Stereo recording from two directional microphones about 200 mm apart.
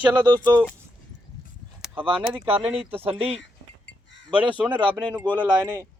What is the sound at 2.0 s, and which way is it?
Speech, 25° right (ahead or behind).